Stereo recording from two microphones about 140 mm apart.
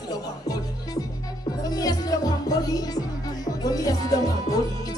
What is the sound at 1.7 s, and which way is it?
Speech, 25° left (ahead or behind).